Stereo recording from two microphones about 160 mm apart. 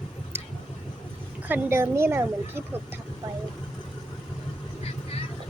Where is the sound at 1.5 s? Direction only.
15° right (ahead or behind).